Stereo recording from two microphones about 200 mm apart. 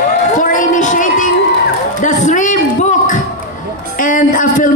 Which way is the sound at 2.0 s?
40° left (ahead or behind).